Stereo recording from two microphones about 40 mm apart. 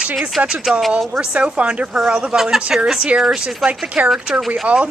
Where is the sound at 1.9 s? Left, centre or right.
Centre.